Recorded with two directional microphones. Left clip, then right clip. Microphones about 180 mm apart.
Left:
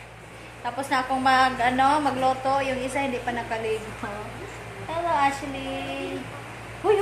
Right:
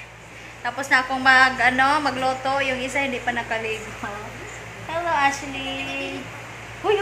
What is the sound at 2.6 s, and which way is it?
A woman's voice, 10° right (ahead or behind).